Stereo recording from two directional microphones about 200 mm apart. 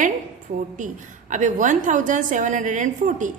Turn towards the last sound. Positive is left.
turn(degrees=-40)  # may be behind; listen again after turning